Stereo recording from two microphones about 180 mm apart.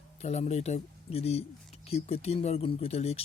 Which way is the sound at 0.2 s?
40° left (ahead or behind).